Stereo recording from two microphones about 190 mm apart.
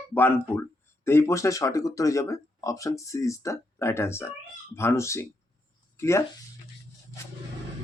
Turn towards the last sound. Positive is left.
turn(degrees=15)  # may be behind; listen again after turning